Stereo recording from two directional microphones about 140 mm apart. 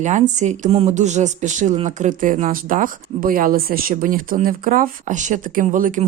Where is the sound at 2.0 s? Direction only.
75° right (ahead or behind).